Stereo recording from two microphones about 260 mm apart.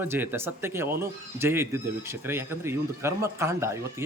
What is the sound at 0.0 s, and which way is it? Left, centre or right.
Speech, centre.